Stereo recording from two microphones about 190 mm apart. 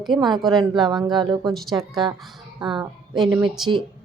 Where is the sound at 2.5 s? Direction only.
20° right (ahead or behind).